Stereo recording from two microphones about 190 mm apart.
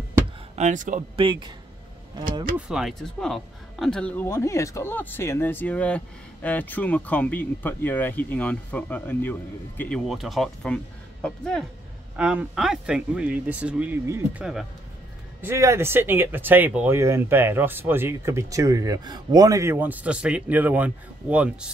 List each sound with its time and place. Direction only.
0.6 s speech: 40° right (ahead or behind)
1.1 s speech: 25° right (ahead or behind)
2.5 s speech: 5° right (ahead or behind)